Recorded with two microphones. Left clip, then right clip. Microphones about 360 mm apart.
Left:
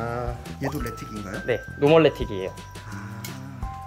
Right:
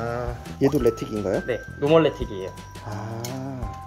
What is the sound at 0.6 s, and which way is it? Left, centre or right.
Speech, centre.